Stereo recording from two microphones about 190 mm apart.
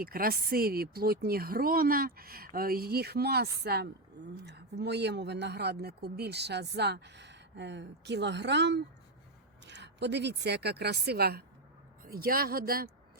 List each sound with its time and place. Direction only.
0.0 s speech: 50° right (ahead or behind)